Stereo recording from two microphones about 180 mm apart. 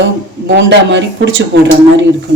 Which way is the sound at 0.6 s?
90° right.